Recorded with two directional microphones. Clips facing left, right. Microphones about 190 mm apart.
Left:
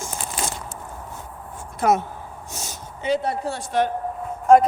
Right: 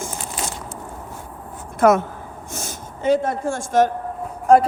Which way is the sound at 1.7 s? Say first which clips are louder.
Right 5 dB; 50° right (ahead or behind).